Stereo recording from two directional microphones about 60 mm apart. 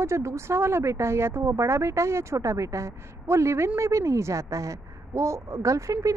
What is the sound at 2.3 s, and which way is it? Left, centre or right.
A woman's voice, right.